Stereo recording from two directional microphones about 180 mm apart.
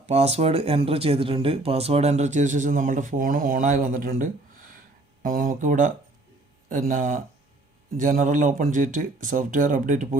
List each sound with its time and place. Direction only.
0.0 s speech: 35° right (ahead or behind)